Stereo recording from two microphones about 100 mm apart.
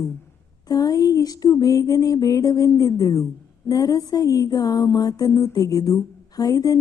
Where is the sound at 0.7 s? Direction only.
40° left (ahead or behind).